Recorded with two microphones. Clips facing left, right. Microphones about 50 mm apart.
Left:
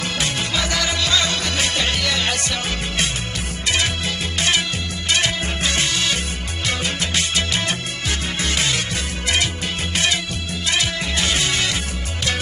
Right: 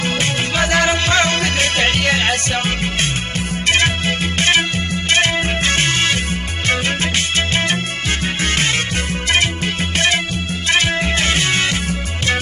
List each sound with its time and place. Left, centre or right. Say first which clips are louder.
0.0 s music: right 4 dB; right
9.9 s music: right 4 dB; right